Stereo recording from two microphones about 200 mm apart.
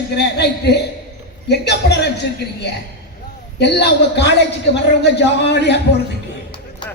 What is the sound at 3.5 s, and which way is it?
A man's voice, 55° left (ahead or behind).